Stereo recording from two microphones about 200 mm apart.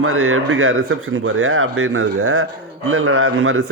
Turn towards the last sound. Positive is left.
turn(degrees=-90)